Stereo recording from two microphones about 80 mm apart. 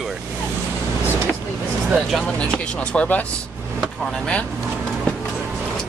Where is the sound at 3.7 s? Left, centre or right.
Centre.